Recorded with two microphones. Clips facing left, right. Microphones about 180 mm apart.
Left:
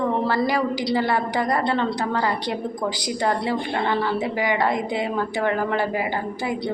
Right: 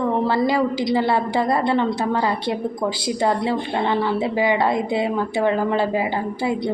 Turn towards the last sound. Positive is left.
turn(degrees=-25)  # may be behind; listen again after turning